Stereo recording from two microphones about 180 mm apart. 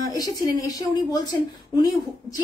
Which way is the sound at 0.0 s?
20° left (ahead or behind).